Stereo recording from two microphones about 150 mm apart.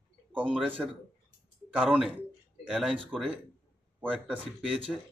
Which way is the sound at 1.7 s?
5° right (ahead or behind).